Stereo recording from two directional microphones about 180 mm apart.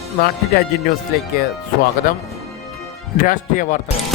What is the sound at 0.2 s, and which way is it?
Speech, 60° left (ahead or behind).